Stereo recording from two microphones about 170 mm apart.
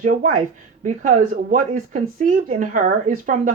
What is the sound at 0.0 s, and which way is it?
Speech, 50° right (ahead or behind).